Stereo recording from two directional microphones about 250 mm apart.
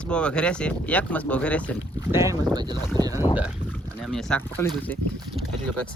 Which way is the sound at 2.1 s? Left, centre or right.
Centre.